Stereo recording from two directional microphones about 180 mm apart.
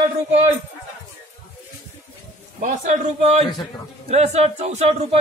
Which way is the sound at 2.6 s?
45° right (ahead or behind).